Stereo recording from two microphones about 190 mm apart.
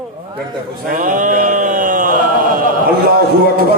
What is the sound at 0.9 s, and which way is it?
Speech, 45° right (ahead or behind).